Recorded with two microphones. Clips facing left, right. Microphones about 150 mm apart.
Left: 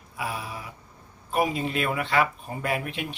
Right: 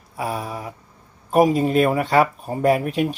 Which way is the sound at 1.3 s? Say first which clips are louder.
Right 9 dB; 40° right (ahead or behind).